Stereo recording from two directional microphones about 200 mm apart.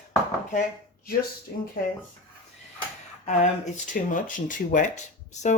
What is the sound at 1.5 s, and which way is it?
Speech, 50° left (ahead or behind).